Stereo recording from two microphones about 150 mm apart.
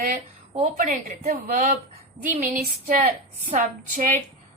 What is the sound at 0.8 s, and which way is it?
A woman's voice, 65° right (ahead or behind).